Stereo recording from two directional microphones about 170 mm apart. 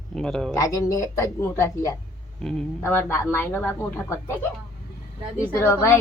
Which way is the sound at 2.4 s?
5° left (ahead or behind).